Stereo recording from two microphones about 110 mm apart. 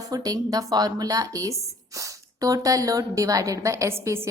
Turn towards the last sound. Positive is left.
turn(degrees=-25)  # may be behind; listen again after turning